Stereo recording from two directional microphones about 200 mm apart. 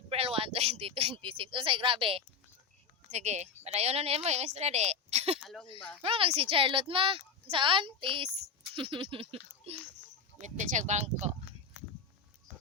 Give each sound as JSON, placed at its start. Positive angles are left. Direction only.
{"t": 0.1, "sound": "a woman's voice", "side_deg": -30}
{"t": 10.4, "sound": "a woman's voice", "side_deg": -35}